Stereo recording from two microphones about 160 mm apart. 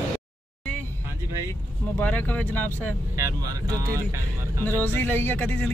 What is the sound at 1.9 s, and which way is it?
Speech, 10° left (ahead or behind).